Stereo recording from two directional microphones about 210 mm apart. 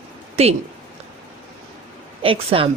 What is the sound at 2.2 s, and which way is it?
Speech, 25° right (ahead or behind).